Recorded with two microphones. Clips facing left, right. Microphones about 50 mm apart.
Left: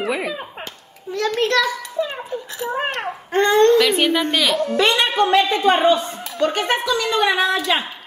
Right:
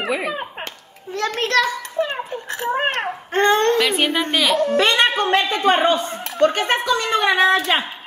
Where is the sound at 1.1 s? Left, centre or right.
Right.